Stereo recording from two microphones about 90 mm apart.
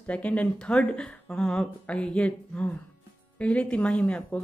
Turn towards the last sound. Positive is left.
turn(degrees=10)  # may be behind; listen again after turning